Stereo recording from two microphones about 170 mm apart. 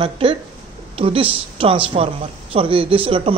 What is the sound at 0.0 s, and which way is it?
Speech, 30° right (ahead or behind).